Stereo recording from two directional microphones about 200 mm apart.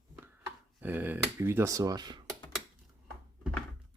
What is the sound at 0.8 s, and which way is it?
Speech, 10° right (ahead or behind).